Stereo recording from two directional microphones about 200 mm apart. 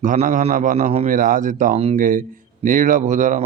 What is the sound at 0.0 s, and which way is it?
Speech, 40° right (ahead or behind).